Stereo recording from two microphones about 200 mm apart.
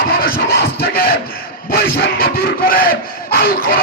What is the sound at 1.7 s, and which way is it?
Crowd, 50° left (ahead or behind).